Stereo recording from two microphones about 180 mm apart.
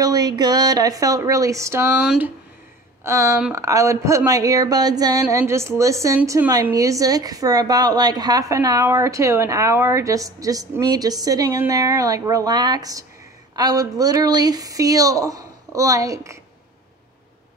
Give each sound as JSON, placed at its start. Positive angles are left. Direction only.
{"t": 0.0, "sound": "a woman's voice", "side_deg": -20}